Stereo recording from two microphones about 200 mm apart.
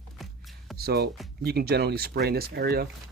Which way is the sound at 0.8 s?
50° right (ahead or behind).